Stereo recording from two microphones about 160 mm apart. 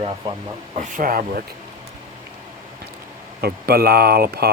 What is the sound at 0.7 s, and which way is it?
Speech, 55° right (ahead or behind).